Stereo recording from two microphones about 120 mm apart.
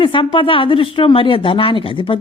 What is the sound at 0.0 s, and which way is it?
Speech, 45° left (ahead or behind).